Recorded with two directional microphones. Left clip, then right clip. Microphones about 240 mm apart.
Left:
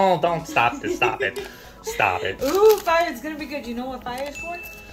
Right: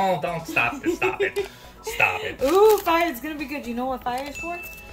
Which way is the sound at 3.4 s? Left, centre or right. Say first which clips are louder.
Right 1 dB; right.